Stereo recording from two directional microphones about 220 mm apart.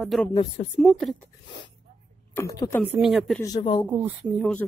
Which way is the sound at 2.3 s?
15° left (ahead or behind).